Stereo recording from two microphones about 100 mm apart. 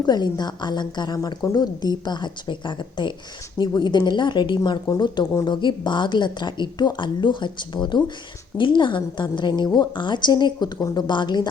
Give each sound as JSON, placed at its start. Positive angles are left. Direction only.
{"t": 0.0, "sound": "a woman's voice", "side_deg": 45}